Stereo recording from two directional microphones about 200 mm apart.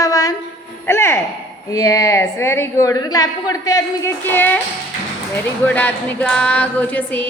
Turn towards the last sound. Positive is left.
turn(degrees=10)  # may be behind; listen again after turning